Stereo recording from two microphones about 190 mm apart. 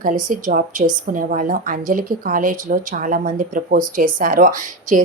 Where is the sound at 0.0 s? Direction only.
45° right (ahead or behind).